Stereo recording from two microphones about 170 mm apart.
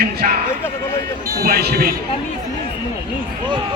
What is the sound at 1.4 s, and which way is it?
Speech, 65° right (ahead or behind).